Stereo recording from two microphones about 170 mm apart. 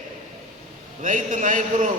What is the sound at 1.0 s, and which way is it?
Speech, 50° right (ahead or behind).